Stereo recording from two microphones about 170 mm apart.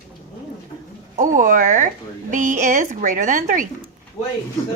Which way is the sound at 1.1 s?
50° right (ahead or behind).